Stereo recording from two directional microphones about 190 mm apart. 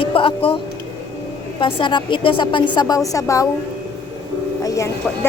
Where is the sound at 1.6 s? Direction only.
25° left (ahead or behind).